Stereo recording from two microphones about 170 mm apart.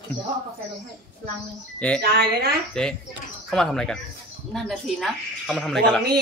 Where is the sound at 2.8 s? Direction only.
5° left (ahead or behind).